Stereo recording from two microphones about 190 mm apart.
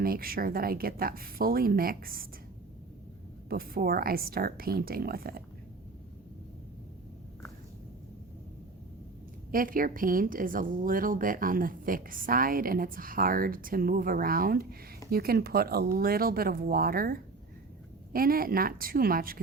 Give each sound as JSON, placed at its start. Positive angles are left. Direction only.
{"t": 0.0, "sound": "speech", "side_deg": -50}
{"t": 3.5, "sound": "speech", "side_deg": -50}
{"t": 9.5, "sound": "speech", "side_deg": -50}